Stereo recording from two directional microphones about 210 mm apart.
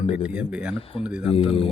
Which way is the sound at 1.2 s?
25° left (ahead or behind).